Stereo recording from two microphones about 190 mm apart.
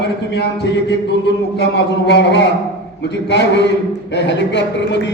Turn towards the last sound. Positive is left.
turn(degrees=65)  # may be behind; listen again after turning